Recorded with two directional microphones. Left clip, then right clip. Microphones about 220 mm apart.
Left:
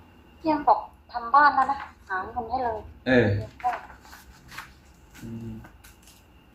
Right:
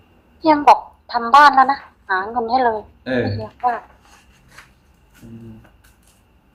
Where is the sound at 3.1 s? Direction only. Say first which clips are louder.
Left 1 dB; 10° right (ahead or behind).